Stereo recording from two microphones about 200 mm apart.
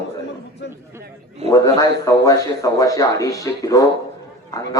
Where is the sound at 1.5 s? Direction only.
15° left (ahead or behind).